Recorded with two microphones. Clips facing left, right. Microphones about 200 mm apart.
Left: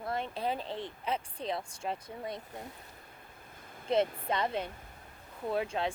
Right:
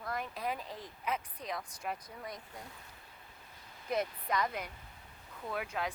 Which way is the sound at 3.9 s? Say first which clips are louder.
Left 5 dB; 25° left (ahead or behind).